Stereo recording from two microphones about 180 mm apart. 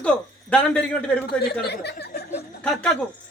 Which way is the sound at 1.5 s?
65° left (ahead or behind).